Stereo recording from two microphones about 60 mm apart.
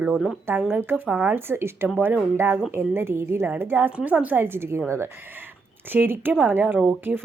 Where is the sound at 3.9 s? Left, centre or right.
Right.